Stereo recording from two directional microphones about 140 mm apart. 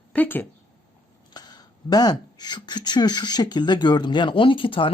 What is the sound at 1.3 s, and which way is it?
Speech, 30° left (ahead or behind).